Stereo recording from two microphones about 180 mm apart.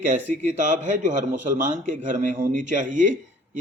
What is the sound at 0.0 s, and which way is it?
A man's voice, 45° right (ahead or behind).